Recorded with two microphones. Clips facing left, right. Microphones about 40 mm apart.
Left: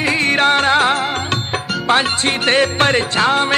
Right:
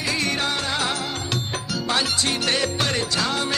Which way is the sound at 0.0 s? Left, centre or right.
Left.